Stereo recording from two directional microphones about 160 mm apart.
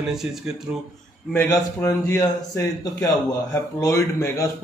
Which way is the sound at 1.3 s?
15° left (ahead or behind).